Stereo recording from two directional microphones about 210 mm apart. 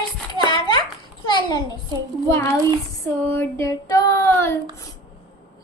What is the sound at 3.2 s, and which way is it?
Female singing, 10° left (ahead or behind).